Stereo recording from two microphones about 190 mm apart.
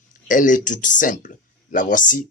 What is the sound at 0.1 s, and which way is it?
Speech, 45° left (ahead or behind).